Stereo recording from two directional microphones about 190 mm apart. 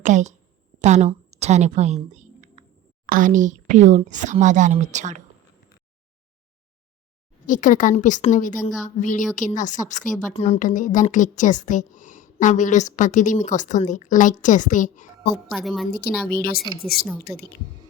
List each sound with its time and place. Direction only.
0.0 s a woman's voice: 40° right (ahead or behind)
7.4 s a woman's voice: 45° left (ahead or behind)
15.4 s a woman's voice: centre (ahead or behind)
15.9 s a woman's voice: 55° left (ahead or behind)